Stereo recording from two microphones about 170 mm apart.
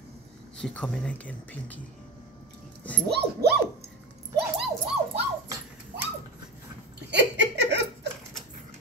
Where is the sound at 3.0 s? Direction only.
70° right (ahead or behind).